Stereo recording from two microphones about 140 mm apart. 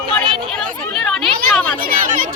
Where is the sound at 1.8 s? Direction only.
90° right.